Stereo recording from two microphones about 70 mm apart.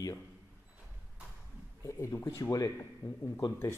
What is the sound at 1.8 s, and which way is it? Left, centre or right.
Speech, left.